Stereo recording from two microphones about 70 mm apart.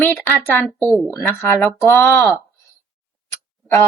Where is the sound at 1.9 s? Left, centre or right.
Left.